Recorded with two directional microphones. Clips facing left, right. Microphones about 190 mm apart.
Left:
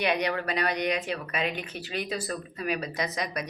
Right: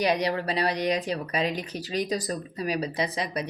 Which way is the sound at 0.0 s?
35° right (ahead or behind).